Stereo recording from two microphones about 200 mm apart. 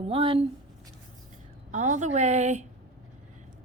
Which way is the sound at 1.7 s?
35° right (ahead or behind).